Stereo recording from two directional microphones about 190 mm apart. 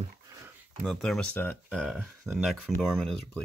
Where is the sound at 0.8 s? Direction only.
Centre (ahead or behind).